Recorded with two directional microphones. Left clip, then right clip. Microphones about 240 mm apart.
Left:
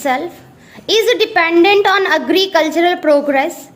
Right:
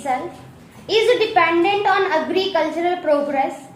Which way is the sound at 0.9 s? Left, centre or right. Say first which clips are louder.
Left 3 dB; left.